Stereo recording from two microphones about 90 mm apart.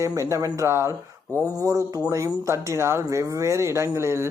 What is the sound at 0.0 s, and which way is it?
Speech, 35° right (ahead or behind).